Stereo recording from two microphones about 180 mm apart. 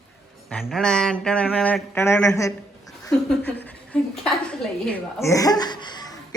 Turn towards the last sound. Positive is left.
turn(degrees=25)  # may be behind; listen again after turning